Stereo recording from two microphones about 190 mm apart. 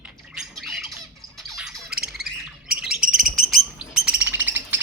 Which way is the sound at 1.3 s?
Centre (ahead or behind).